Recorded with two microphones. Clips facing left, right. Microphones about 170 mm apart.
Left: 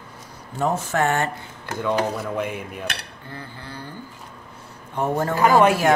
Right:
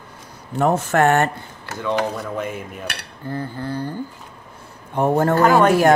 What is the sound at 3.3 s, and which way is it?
Speech, 45° right (ahead or behind).